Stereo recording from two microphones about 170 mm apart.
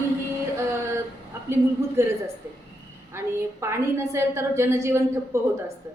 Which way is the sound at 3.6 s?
15° right (ahead or behind).